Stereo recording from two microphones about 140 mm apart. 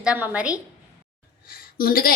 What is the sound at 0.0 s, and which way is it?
Speech, 10° right (ahead or behind).